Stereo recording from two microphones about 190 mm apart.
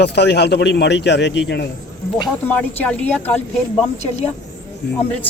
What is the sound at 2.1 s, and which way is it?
Speech, 5° left (ahead or behind).